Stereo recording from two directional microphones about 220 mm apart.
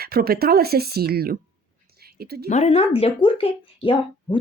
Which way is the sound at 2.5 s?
30° left (ahead or behind).